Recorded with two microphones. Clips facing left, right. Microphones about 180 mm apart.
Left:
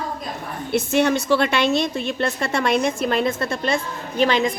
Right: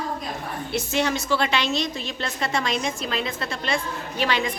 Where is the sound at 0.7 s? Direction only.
55° left (ahead or behind).